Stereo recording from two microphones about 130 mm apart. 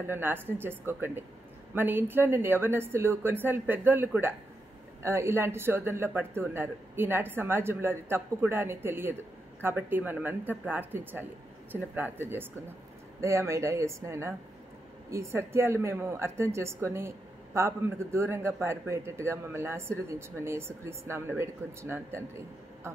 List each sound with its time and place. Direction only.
0.0 s a man's voice: 15° right (ahead or behind)